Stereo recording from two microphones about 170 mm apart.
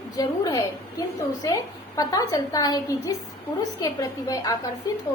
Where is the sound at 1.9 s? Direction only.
20° left (ahead or behind).